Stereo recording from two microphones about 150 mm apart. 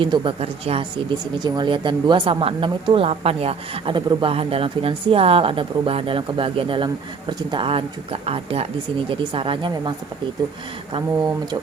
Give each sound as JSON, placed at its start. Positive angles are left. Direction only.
{"t": 0.0, "sound": "speech", "side_deg": -35}
{"t": 1.4, "sound": "speech", "side_deg": -30}